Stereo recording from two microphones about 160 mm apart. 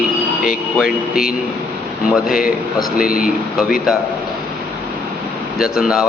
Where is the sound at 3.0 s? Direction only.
65° left (ahead or behind).